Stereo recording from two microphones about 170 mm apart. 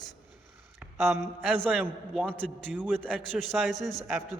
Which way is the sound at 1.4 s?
Centre (ahead or behind).